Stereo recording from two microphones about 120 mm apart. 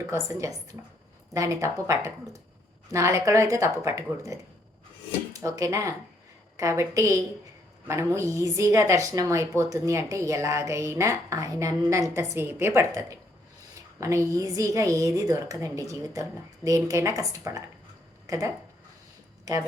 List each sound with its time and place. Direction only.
0.0 s speech: 25° right (ahead or behind)